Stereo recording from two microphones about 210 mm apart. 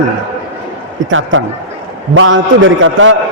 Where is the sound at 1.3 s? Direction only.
70° right (ahead or behind).